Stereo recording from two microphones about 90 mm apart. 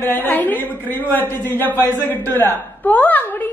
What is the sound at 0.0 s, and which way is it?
A woman's voice, 25° left (ahead or behind).